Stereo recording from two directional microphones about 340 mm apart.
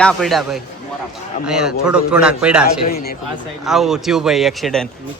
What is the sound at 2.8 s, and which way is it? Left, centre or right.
Speech, left.